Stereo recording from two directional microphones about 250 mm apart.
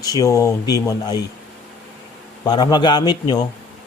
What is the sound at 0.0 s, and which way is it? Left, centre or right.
Speech, centre.